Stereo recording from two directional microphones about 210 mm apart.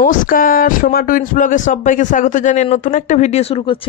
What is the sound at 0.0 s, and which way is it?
Speech, 40° left (ahead or behind).